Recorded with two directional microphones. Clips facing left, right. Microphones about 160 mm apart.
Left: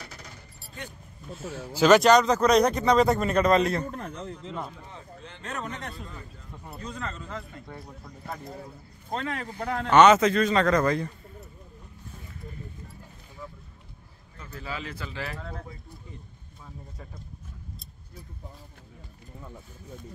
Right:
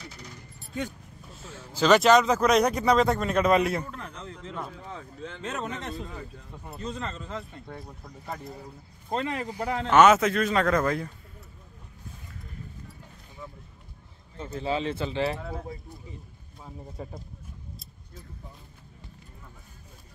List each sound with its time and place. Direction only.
1.7 s speech: 5° left (ahead or behind)
3.9 s a man's voice: 35° left (ahead or behind)
5.6 s speech: 25° right (ahead or behind)
9.1 s speech: 10° right (ahead or behind)
14.4 s speech: 25° right (ahead or behind)
15.3 s speech: 5° right (ahead or behind)
16.6 s speech: 25° right (ahead or behind)